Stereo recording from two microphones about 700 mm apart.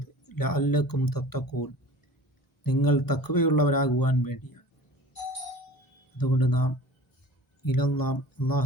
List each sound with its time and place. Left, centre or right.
0.3 s speech: left
6.1 s speech: left